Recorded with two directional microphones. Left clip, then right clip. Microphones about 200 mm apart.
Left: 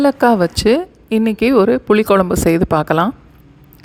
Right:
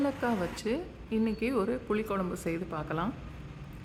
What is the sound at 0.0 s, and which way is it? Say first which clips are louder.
A woman's voice: left 19 dB; 45° left (ahead or behind).